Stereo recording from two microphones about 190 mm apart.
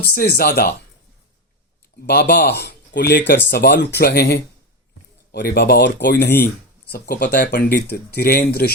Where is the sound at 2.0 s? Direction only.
55° left (ahead or behind).